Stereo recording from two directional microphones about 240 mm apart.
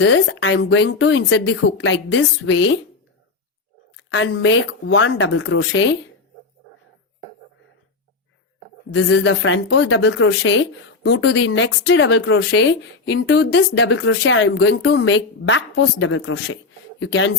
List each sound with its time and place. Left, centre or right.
0.0 s speech: left
3.9 s speech: left
8.9 s speech: left